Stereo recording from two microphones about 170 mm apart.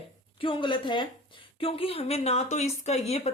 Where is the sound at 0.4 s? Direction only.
30° left (ahead or behind).